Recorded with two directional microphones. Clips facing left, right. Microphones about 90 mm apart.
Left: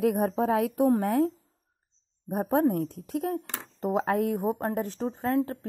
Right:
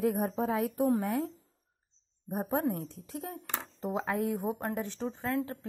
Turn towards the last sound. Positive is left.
turn(degrees=35)  # may be behind; listen again after turning